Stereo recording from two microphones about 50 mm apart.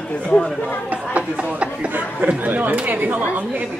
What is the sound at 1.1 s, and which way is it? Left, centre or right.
Speech, right.